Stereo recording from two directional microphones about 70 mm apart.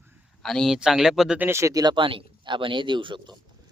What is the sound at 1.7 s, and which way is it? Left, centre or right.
Speech, right.